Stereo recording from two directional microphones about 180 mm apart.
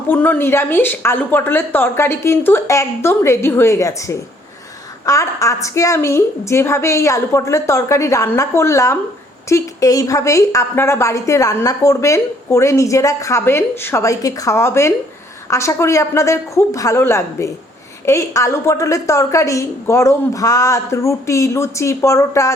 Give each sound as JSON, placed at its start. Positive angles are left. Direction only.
{"t": 0.1, "sound": "a woman's voice", "side_deg": 10}